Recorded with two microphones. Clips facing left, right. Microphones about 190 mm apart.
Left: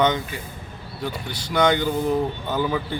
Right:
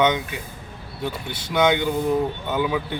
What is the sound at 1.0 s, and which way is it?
Speech, 25° right (ahead or behind).